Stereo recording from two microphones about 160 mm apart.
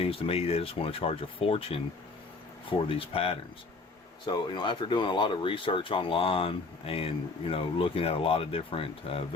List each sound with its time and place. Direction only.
0.0 s speech: 35° left (ahead or behind)